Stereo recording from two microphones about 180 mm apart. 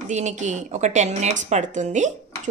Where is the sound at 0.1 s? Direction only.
40° right (ahead or behind).